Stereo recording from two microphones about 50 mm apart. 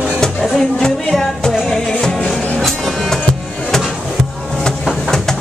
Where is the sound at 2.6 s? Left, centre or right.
Centre.